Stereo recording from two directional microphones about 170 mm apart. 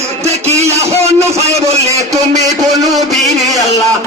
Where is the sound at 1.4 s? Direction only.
40° right (ahead or behind).